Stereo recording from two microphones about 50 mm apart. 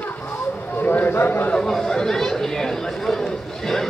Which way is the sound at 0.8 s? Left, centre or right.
Left.